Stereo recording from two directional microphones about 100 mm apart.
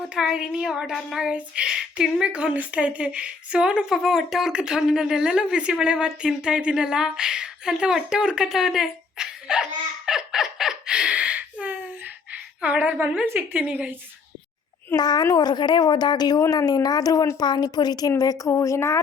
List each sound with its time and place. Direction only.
0.1 s a woman's voice: 5° right (ahead or behind)
10.1 s a sound: 5° right (ahead or behind)
12.6 s speech: 15° right (ahead or behind)
14.9 s a woman's voice: 45° left (ahead or behind)